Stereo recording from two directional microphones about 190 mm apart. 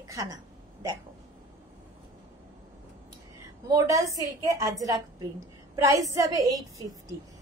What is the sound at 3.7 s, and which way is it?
A woman's voice, 15° right (ahead or behind).